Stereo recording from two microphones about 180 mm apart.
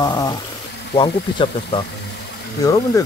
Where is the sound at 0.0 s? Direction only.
20° left (ahead or behind).